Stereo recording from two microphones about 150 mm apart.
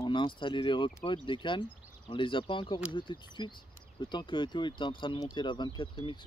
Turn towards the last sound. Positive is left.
turn(degrees=35)  # may be behind; listen again after turning